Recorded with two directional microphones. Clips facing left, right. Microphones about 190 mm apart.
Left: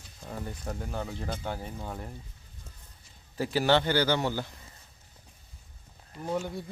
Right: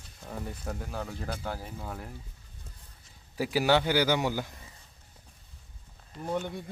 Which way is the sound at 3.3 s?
10° right (ahead or behind).